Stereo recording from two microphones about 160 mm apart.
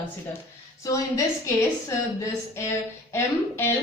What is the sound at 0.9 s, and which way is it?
Speech, 20° left (ahead or behind).